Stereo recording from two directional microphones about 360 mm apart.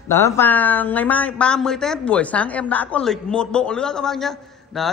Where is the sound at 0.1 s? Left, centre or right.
Centre.